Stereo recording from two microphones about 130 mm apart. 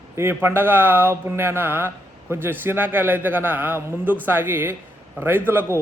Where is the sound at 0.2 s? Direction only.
15° right (ahead or behind).